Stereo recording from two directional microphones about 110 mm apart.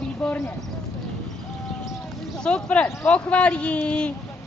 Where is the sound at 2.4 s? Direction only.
10° left (ahead or behind).